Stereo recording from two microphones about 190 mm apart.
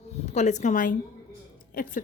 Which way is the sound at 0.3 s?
35° left (ahead or behind).